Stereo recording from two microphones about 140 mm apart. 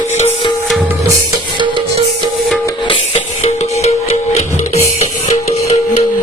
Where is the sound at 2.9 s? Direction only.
45° left (ahead or behind).